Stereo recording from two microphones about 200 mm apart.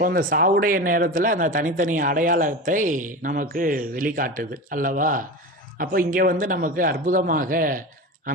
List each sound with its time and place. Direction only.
0.0 s speech: 45° right (ahead or behind)